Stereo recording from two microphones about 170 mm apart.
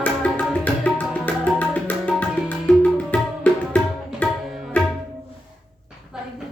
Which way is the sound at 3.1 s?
10° left (ahead or behind).